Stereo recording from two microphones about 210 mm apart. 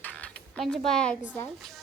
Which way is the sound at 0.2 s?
5° left (ahead or behind).